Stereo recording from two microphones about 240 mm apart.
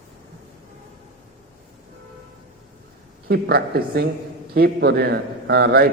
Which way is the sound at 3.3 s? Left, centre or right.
Right.